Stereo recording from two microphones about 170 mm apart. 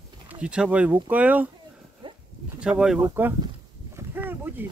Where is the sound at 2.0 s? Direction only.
30° right (ahead or behind).